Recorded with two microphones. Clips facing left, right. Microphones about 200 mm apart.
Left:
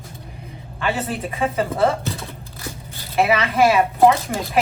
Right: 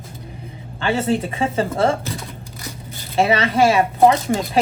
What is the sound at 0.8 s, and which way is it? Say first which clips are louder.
Speech: right 5 dB; 30° right (ahead or behind).